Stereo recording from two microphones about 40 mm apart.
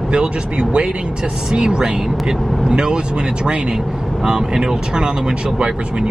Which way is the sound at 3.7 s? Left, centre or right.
Centre.